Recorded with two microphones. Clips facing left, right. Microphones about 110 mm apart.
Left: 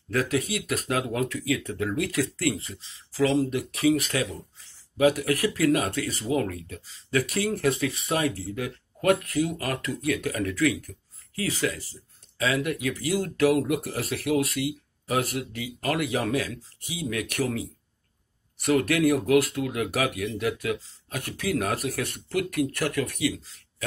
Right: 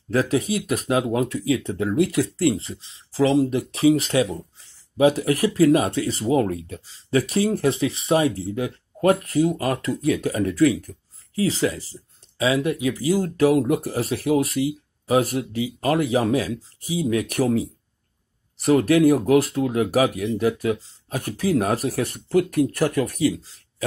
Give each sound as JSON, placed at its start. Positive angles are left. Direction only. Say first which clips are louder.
{"t": 0.1, "sound": "speech", "louder": "right 5 dB", "side_deg": -25}
{"t": 14.0, "sound": "speech", "louder": "right 3 dB", "side_deg": -20}